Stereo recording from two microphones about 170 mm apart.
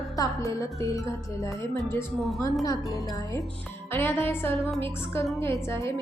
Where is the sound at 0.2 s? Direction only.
20° left (ahead or behind).